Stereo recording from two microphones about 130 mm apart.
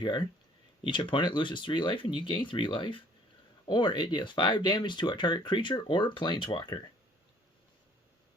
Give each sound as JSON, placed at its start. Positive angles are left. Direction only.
{"t": 0.0, "sound": "speech", "side_deg": 35}